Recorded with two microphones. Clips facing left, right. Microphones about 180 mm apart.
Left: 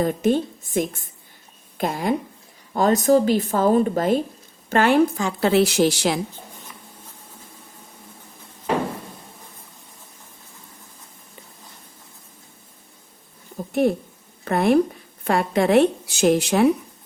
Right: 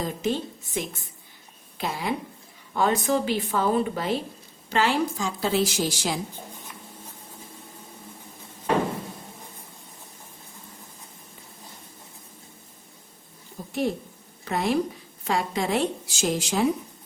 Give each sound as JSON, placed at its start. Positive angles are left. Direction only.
{"t": 0.0, "sound": "a woman's voice", "side_deg": 55}
{"t": 13.6, "sound": "a sound", "side_deg": 55}
{"t": 14.4, "sound": "speech", "side_deg": 55}